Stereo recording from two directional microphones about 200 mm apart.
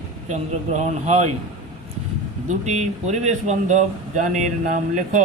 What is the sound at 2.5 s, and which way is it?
Speech, 35° right (ahead or behind).